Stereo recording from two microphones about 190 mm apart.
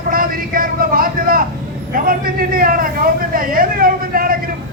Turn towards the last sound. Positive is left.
turn(degrees=-50)  # may be behind; listen again after turning